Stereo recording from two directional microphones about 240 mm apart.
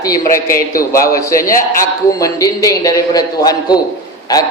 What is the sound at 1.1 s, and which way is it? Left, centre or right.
A man's voice, centre.